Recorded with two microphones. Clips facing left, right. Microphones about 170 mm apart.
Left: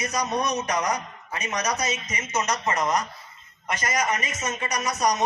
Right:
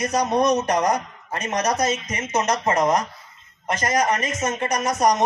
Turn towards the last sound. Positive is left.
turn(degrees=-50)  # may be behind; listen again after turning